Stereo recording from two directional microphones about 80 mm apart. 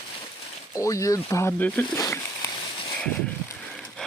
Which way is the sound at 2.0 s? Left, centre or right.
Left.